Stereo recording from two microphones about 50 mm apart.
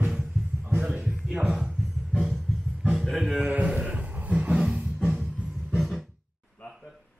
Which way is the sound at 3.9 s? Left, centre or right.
Right.